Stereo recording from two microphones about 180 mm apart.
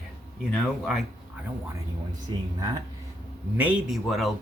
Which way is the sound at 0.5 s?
Centre (ahead or behind).